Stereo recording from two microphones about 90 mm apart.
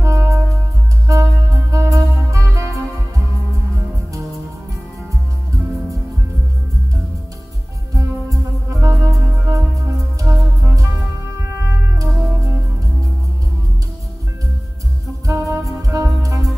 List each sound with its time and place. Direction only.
0.0 s music: 35° right (ahead or behind)
7.9 s music: 35° right (ahead or behind)
11.6 s music: 30° right (ahead or behind)
15.2 s music: 35° right (ahead or behind)